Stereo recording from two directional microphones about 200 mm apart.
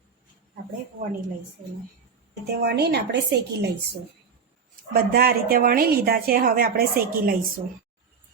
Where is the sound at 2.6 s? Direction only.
55° right (ahead or behind).